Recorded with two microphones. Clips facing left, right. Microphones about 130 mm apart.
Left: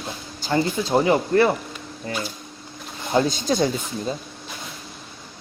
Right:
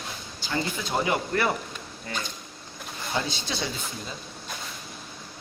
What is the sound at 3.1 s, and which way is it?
Speech, 45° left (ahead or behind).